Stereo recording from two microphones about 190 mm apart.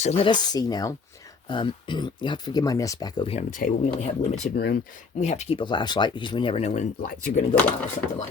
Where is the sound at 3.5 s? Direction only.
40° left (ahead or behind).